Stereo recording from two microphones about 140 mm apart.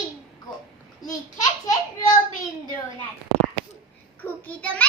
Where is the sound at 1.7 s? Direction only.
25° left (ahead or behind).